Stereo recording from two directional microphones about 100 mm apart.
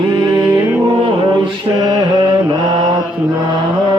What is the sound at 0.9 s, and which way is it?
Mantra, 60° right (ahead or behind).